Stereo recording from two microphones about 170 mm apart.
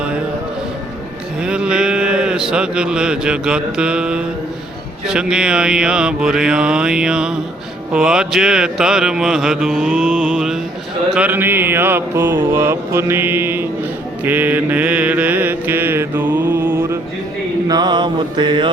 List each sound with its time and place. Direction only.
1.4 s speech: 5° right (ahead or behind)
5.0 s mantra: 5° right (ahead or behind)
17.7 s mantra: 25° right (ahead or behind)